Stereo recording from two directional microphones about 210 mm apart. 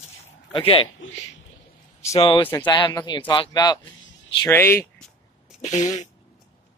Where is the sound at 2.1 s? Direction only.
25° left (ahead or behind).